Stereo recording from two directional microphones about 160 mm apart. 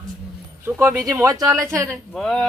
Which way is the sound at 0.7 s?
15° right (ahead or behind).